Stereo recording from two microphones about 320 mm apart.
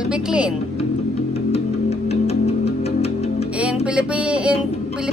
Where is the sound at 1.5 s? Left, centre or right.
Centre.